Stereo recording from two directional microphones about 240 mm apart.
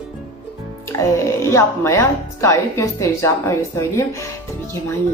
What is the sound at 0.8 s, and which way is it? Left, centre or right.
A woman's voice, centre.